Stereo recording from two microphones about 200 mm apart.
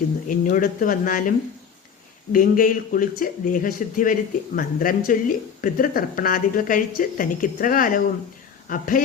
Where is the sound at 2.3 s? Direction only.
45° left (ahead or behind).